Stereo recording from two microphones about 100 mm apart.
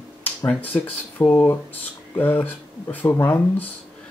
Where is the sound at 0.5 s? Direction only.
15° left (ahead or behind).